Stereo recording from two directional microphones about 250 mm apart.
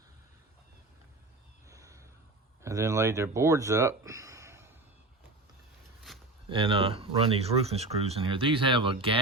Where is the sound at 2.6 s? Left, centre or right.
Centre.